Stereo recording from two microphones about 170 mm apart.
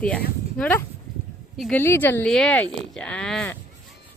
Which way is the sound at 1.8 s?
15° left (ahead or behind).